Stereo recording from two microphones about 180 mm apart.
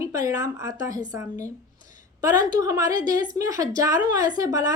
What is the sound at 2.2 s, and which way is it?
A woman's voice, 20° right (ahead or behind).